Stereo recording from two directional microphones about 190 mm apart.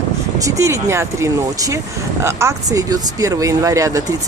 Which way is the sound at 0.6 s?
15° right (ahead or behind).